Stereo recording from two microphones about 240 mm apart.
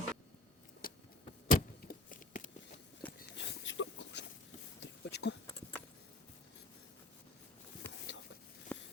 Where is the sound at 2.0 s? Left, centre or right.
Left.